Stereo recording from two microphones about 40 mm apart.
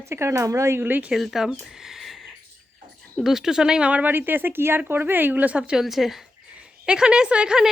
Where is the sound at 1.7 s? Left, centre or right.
Centre.